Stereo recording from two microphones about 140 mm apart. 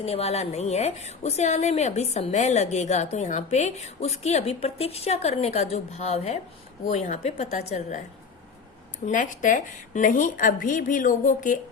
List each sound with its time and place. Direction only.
0.0 s a woman's voice: 45° left (ahead or behind)
9.0 s a woman's voice: 70° left (ahead or behind)